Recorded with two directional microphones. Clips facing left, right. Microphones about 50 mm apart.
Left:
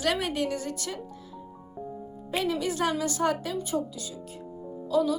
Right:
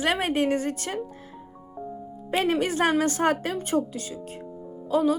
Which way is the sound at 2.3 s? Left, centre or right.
Right.